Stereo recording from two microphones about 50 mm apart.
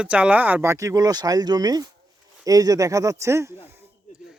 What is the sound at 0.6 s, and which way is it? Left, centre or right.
Speech, right.